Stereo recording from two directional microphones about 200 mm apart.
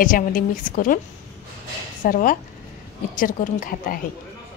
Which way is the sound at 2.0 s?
45° left (ahead or behind).